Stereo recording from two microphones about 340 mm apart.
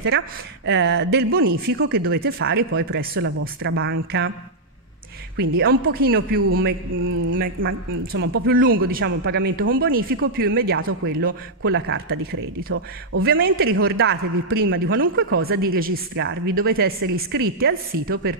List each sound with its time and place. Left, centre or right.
0.7 s a man's voice: right
5.4 s a man's voice: right